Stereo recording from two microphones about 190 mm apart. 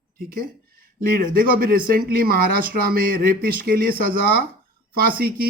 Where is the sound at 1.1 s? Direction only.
50° right (ahead or behind).